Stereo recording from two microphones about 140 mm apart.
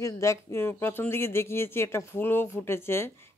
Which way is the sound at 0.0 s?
20° left (ahead or behind).